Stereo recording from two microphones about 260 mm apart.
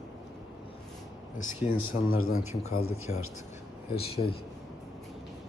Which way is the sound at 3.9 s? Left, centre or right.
Left.